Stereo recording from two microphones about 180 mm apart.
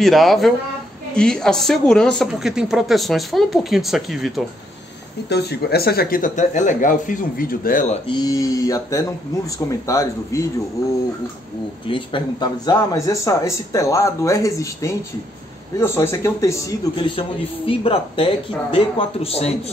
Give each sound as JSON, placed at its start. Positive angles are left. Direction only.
{"t": 0.0, "sound": "speech", "side_deg": 0}
{"t": 5.3, "sound": "speech", "side_deg": 65}
{"t": 8.1, "sound": "speech", "side_deg": 20}
{"t": 11.9, "sound": "speech", "side_deg": 25}
{"t": 16.9, "sound": "a man's voice", "side_deg": 30}